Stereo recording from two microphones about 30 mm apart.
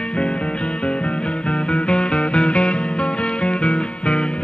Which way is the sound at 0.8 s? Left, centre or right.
Left.